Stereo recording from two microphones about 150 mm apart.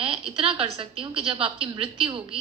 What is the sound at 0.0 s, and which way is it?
A woman's voice, 35° right (ahead or behind).